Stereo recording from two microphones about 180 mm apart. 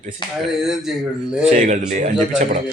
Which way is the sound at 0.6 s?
Centre (ahead or behind).